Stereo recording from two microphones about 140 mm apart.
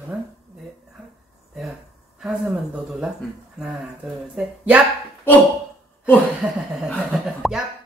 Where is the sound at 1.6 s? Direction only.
5° right (ahead or behind).